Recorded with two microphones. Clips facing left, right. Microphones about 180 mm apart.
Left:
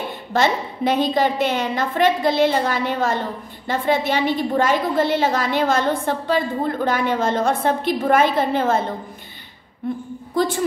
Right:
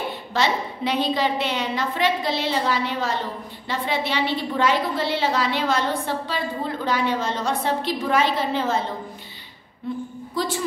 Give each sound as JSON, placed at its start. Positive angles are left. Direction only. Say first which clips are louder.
{"t": 0.3, "sound": "a woman's voice", "louder": "left 4 dB", "side_deg": 50}
{"t": 9.8, "sound": "a woman's voice", "louder": "left 3 dB", "side_deg": 55}